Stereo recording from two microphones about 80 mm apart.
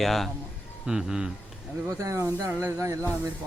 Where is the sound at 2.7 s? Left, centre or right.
Right.